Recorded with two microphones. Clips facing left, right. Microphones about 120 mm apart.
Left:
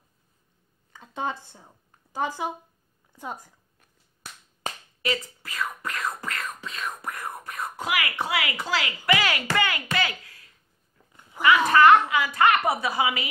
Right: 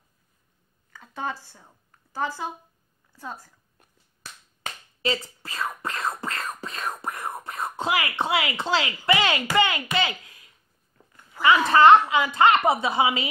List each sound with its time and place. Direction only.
0.9 s a woman's voice: 20° left (ahead or behind)
5.0 s beatboxing: 30° right (ahead or behind)
9.9 s speech: 20° right (ahead or behind)
11.4 s speech: 15° left (ahead or behind)
11.7 s a woman's voice: 25° right (ahead or behind)